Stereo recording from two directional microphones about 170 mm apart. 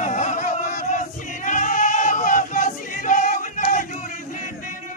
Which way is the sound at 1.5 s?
45° left (ahead or behind).